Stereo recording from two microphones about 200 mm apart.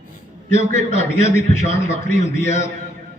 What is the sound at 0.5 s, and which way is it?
A man's voice, 35° left (ahead or behind).